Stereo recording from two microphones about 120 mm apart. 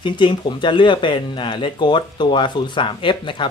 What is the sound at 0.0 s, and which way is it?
Speech, 40° left (ahead or behind).